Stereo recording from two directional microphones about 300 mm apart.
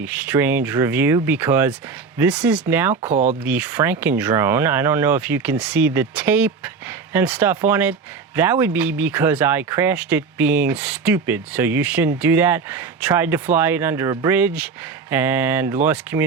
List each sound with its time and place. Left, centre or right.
0.0 s speech: centre
2.9 s speech: right
3.4 s speech: centre